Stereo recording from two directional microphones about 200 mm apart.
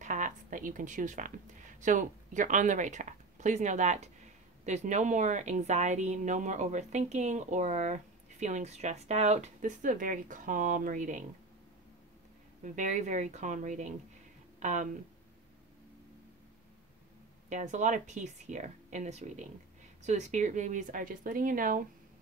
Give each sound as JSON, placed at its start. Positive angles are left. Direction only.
{"t": 0.0, "sound": "a woman's voice", "side_deg": -40}
{"t": 12.6, "sound": "speech", "side_deg": -40}
{"t": 17.5, "sound": "speech", "side_deg": -35}